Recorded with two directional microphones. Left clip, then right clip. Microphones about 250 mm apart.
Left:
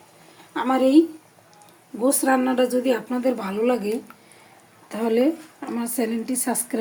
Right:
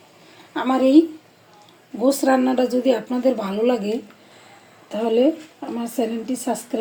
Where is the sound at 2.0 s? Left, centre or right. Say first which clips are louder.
Right 2 dB; centre.